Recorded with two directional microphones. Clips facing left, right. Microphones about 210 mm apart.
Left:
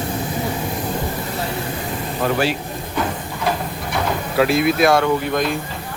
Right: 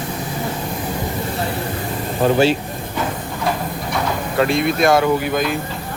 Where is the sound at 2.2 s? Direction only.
30° right (ahead or behind).